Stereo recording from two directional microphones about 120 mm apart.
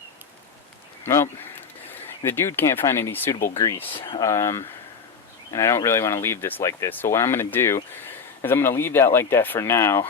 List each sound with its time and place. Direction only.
1.0 s speech: 20° left (ahead or behind)
3.9 s speech: 45° left (ahead or behind)
4.2 s speech: 25° left (ahead or behind)